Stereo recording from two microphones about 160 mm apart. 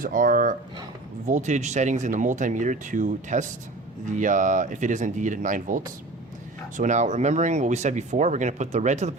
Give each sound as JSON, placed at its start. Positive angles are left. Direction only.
{"t": 0.0, "sound": "speech", "side_deg": -60}